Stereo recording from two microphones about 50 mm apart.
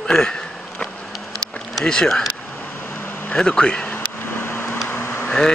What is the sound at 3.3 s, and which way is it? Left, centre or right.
Speech, centre.